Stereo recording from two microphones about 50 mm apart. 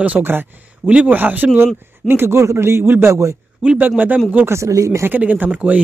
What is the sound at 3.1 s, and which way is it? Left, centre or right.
Speech, right.